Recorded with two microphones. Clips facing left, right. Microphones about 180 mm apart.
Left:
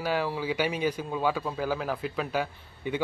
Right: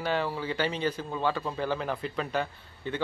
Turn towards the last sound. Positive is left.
turn(degrees=10)  # may be behind; listen again after turning